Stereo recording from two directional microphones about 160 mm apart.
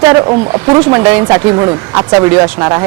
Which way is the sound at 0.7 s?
5° right (ahead or behind).